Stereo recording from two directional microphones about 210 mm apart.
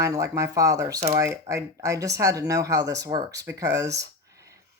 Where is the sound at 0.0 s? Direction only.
15° right (ahead or behind).